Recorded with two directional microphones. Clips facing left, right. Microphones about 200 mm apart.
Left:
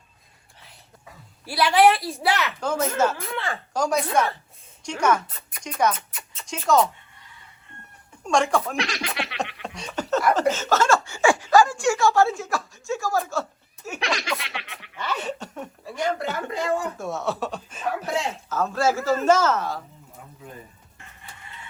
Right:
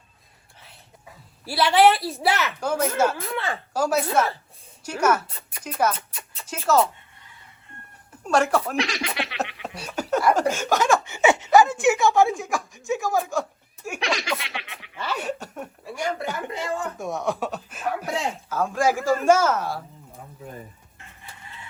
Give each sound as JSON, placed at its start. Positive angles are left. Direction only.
{"t": 1.5, "sound": "a woman's voice", "side_deg": -25}
{"t": 1.8, "sound": "snicker", "side_deg": 0}
{"t": 4.8, "sound": "speech", "side_deg": -5}
{"t": 8.1, "sound": "speech", "side_deg": -5}
{"t": 14.0, "sound": "snicker", "side_deg": 0}
{"t": 16.2, "sound": "speech", "side_deg": -15}